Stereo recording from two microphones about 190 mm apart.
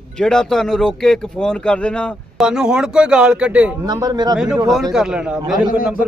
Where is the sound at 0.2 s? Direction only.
5° left (ahead or behind).